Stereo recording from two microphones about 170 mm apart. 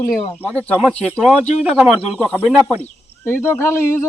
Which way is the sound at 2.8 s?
10° left (ahead or behind).